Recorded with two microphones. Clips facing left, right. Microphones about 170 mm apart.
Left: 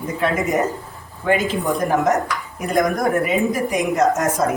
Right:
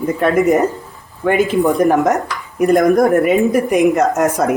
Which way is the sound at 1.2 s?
60° right (ahead or behind).